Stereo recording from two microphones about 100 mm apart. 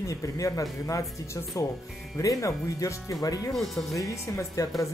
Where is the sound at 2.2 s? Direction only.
35° left (ahead or behind).